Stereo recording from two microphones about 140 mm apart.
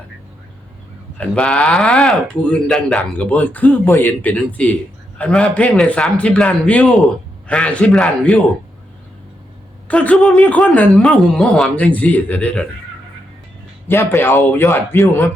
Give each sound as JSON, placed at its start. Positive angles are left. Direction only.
{"t": 1.2, "sound": "speech", "side_deg": 10}
{"t": 9.9, "sound": "speech", "side_deg": 10}
{"t": 13.8, "sound": "speech", "side_deg": 15}